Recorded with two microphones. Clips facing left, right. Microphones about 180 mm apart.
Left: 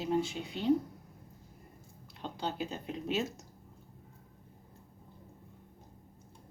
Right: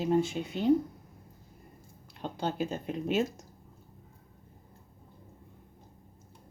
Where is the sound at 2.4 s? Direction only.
50° right (ahead or behind).